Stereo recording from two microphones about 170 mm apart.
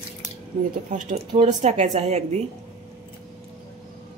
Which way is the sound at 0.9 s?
45° right (ahead or behind).